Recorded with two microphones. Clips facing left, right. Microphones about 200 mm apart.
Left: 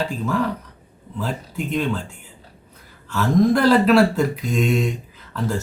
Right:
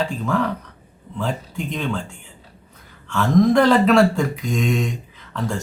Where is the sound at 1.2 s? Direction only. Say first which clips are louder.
Right 1 dB; 5° left (ahead or behind).